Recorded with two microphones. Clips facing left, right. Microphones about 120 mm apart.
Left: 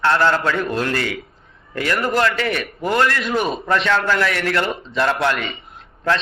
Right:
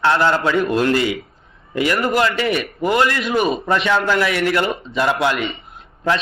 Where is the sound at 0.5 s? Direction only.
5° right (ahead or behind).